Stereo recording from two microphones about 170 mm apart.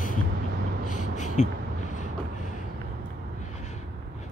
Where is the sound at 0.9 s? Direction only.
45° left (ahead or behind).